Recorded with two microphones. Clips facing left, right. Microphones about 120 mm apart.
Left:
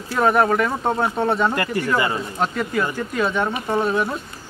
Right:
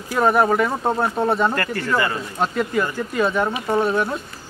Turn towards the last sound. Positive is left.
turn(degrees=0)  # may be behind; listen again after turning